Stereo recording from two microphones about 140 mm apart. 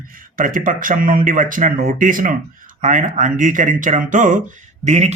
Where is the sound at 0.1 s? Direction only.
75° right (ahead or behind).